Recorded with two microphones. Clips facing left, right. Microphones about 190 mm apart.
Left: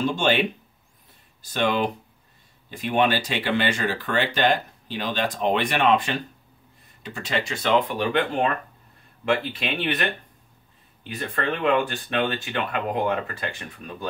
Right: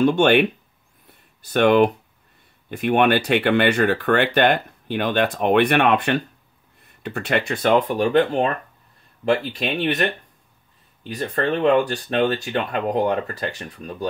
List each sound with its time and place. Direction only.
0.0 s speech: 60° right (ahead or behind); by 10.0 s 40° right (ahead or behind)
11.1 s speech: 40° right (ahead or behind)